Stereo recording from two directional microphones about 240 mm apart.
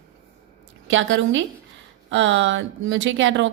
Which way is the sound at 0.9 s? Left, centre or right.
Right.